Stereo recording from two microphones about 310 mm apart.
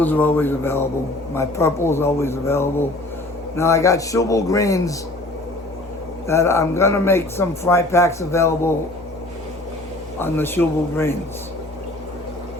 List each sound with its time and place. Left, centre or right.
0.0 s a man's voice: centre
6.2 s a man's voice: centre
10.2 s a man's voice: centre